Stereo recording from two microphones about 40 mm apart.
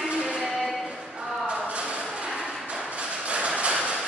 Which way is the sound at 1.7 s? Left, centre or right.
Right.